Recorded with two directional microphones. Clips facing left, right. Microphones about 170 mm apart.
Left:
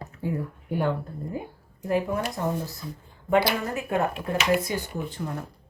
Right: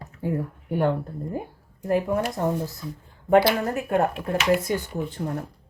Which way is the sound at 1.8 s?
45° right (ahead or behind).